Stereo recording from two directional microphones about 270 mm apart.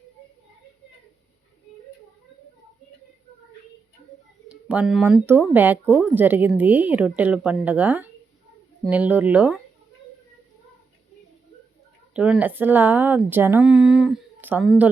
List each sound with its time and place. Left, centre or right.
4.4 s speech: centre
12.1 s speech: centre